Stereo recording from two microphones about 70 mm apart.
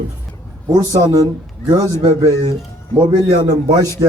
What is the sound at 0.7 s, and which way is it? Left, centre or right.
A man's voice, right.